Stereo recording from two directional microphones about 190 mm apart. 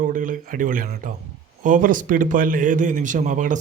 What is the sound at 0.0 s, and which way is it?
A man's voice, 45° right (ahead or behind).